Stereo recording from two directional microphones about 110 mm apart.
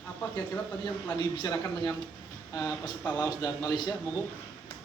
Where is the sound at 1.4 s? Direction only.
40° left (ahead or behind).